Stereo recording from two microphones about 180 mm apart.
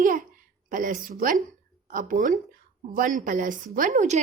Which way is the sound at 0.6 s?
50° right (ahead or behind).